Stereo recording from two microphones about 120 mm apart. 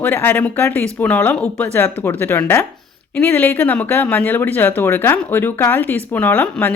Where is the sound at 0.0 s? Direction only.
15° left (ahead or behind).